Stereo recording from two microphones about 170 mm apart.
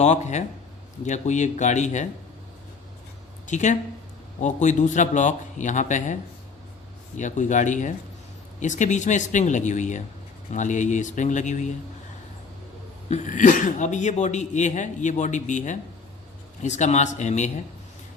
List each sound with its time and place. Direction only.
0.0 s speech: 45° left (ahead or behind)
3.4 s speech: 45° left (ahead or behind)
7.2 s speech: 45° left (ahead or behind)
13.1 s speech: 45° left (ahead or behind)